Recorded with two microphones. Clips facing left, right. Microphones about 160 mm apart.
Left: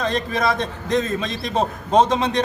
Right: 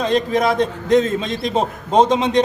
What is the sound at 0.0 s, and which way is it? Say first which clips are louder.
A man's voice: right 4 dB; 15° right (ahead or behind).